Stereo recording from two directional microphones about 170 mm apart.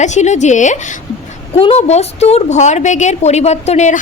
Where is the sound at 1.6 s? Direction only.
35° left (ahead or behind).